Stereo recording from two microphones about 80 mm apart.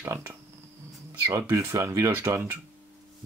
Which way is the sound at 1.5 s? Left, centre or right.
Right.